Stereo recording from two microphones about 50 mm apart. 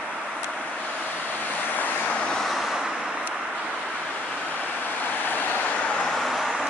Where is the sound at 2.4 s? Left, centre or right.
Centre.